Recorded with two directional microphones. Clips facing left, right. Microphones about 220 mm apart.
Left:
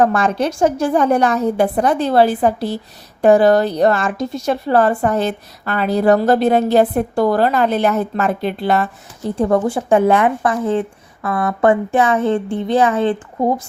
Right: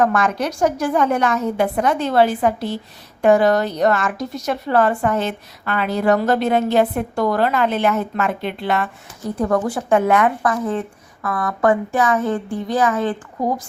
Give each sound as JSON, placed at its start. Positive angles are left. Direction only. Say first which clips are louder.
{"t": 0.0, "sound": "a woman's voice", "louder": "left 3 dB", "side_deg": 30}
{"t": 9.4, "sound": "a woman's voice", "louder": "left 3 dB", "side_deg": 25}